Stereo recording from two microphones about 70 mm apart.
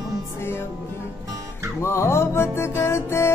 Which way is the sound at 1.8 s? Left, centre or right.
Left.